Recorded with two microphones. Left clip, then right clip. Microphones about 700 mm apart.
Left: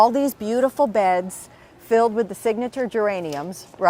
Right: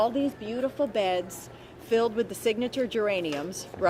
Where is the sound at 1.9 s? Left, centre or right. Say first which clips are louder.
Left 7 dB; left.